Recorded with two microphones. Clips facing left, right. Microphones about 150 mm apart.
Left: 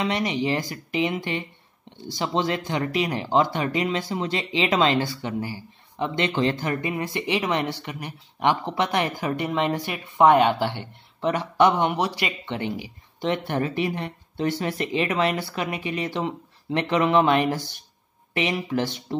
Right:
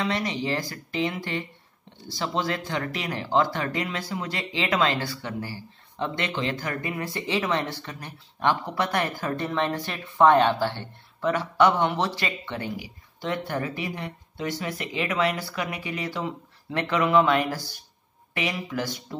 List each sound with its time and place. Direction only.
0.0 s speech: 20° left (ahead or behind)